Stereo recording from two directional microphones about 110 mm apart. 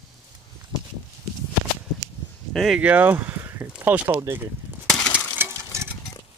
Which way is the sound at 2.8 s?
15° right (ahead or behind).